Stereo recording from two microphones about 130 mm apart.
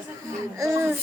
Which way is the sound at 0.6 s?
20° right (ahead or behind).